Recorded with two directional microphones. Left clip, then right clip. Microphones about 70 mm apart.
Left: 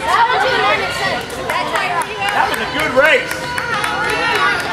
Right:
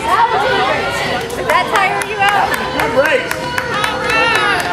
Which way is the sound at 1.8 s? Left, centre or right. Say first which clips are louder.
Right 4 dB; right.